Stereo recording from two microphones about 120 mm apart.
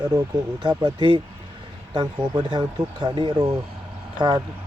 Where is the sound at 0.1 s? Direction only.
35° right (ahead or behind).